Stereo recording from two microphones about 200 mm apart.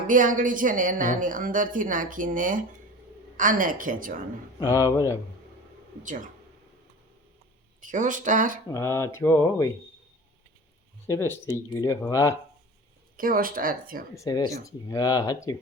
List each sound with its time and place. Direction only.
0.1 s a woman's voice: 40° right (ahead or behind)
4.6 s speech: 15° left (ahead or behind)
6.0 s a woman's voice: 40° right (ahead or behind)
7.8 s speech: 40° right (ahead or behind)
8.7 s speech: 15° left (ahead or behind)
11.0 s speech: 10° left (ahead or behind)
13.1 s a woman's voice: 45° right (ahead or behind)
14.2 s speech: 20° left (ahead or behind)